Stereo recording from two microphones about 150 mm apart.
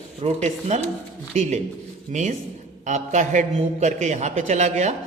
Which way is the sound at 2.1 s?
55° right (ahead or behind).